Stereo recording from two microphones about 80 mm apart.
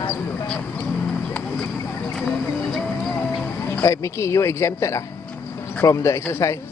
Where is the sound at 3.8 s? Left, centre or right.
Left.